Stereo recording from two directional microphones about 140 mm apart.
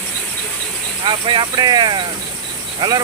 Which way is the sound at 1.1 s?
35° right (ahead or behind).